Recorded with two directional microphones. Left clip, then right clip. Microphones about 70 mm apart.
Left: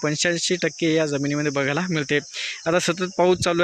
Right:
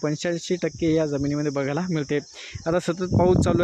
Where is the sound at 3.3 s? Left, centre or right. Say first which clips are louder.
Left 1 dB; right.